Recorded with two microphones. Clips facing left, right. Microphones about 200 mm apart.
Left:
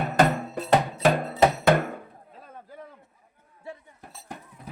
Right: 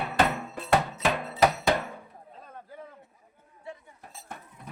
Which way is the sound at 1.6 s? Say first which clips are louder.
Left 5 dB; 55° left (ahead or behind).